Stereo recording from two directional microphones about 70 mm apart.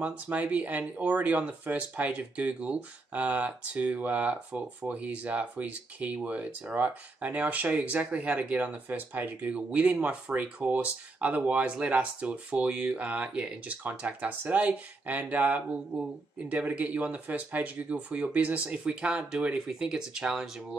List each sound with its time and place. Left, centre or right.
0.0 s speech: centre